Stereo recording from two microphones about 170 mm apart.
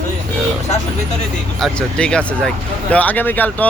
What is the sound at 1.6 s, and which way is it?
Speech, 5° left (ahead or behind).